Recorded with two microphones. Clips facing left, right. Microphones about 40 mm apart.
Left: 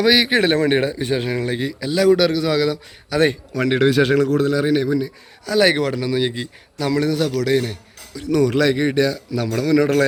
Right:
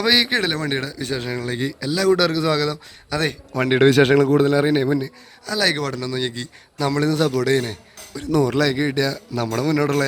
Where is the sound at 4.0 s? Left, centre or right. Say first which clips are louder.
Right 2 dB; right.